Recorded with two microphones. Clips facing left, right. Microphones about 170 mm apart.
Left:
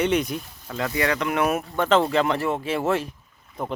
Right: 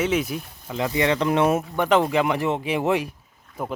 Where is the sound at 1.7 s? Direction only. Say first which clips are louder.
Even; 15° right (ahead or behind).